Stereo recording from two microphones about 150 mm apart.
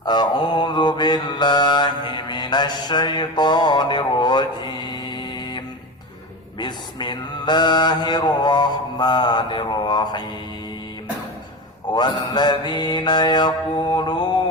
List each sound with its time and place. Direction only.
0.0 s mantra: 30° left (ahead or behind)
11.9 s mantra: 30° left (ahead or behind)